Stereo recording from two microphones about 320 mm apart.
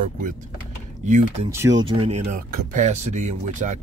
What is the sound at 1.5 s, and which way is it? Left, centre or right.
Speech, centre.